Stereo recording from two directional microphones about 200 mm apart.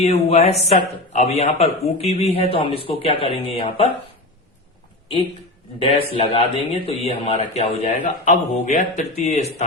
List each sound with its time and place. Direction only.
0.0 s a man's voice: 30° left (ahead or behind)
5.8 s a man's voice: 30° left (ahead or behind)